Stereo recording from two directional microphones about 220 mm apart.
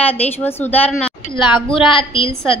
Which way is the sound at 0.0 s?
5° left (ahead or behind).